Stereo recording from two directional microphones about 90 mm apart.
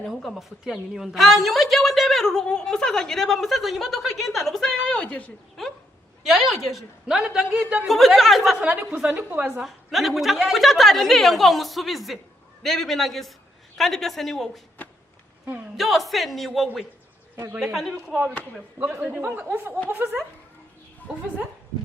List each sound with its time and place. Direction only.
0.0 s a woman's voice: centre (ahead or behind)
4.9 s a man's voice: 15° left (ahead or behind)
6.2 s a woman's voice: centre (ahead or behind)
7.9 s a woman's voice: centre (ahead or behind)
8.6 s a woman's voice: 15° right (ahead or behind)
9.6 s a woman's voice: centre (ahead or behind)
15.7 s a woman's voice: centre (ahead or behind)
17.3 s a woman's voice: 25° right (ahead or behind)
18.8 s speech: 20° right (ahead or behind)